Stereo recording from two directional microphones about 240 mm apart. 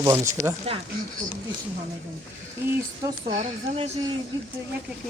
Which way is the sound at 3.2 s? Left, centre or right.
Right.